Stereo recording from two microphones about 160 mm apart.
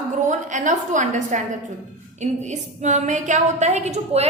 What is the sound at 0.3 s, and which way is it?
A woman's voice, 50° right (ahead or behind).